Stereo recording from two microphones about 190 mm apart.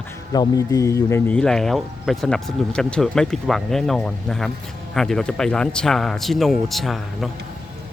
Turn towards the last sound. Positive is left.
turn(degrees=0)  # may be behind; listen again after turning